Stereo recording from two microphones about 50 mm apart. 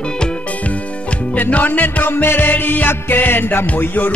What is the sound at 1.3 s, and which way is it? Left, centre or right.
Music, left.